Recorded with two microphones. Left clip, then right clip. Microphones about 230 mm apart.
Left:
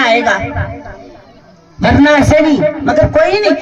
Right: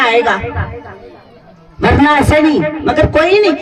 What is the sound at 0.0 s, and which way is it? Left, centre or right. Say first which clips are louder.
Speech: even; right.